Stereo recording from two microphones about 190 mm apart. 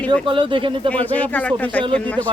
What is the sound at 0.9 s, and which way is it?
A woman's voice, 10° left (ahead or behind).